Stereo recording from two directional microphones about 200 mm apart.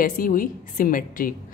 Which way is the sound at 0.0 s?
45° left (ahead or behind).